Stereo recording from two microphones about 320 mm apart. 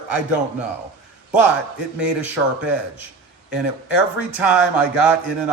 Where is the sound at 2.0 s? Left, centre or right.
Centre.